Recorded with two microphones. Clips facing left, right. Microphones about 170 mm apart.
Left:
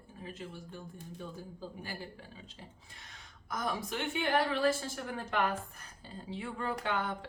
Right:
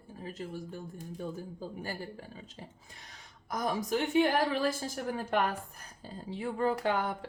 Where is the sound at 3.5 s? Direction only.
40° right (ahead or behind).